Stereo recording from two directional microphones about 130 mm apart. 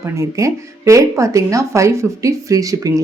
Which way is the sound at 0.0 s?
25° right (ahead or behind).